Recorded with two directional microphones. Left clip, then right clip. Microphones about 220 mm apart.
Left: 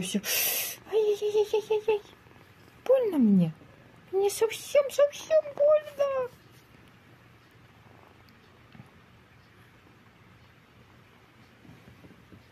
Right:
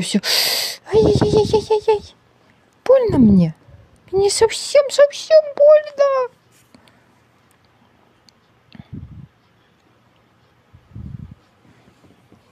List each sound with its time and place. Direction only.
0.0 s speech: 35° right (ahead or behind)